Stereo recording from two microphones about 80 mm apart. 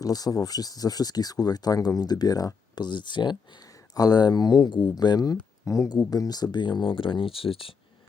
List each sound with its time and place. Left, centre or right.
0.0 s speech: left
3.9 s speech: left
4.7 s speech: left
5.6 s speech: left